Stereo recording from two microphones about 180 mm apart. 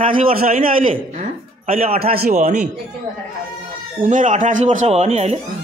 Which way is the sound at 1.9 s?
60° right (ahead or behind).